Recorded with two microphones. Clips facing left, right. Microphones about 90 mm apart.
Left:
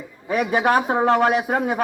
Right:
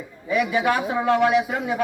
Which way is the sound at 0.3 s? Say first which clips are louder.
Left 2 dB; 45° left (ahead or behind).